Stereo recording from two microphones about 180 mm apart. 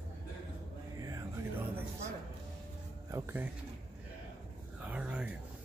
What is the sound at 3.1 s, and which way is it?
Speech, 10° right (ahead or behind).